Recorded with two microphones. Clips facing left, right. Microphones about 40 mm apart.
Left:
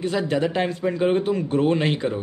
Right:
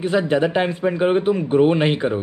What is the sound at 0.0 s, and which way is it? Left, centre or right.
Speech, right.